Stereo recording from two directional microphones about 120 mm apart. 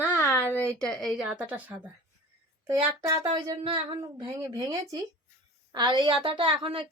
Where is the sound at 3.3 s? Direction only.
35° right (ahead or behind).